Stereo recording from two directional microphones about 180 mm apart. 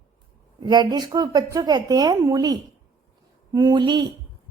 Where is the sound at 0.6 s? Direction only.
20° right (ahead or behind).